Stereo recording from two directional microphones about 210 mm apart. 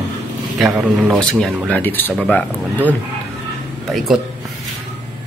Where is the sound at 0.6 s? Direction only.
5° right (ahead or behind).